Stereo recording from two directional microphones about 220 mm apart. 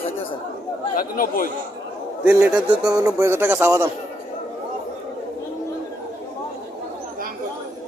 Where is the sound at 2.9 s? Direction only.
15° right (ahead or behind).